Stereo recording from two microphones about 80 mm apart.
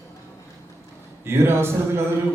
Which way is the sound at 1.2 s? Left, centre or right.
Right.